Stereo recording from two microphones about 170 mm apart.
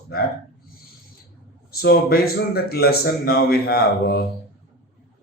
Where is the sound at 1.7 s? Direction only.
65° left (ahead or behind).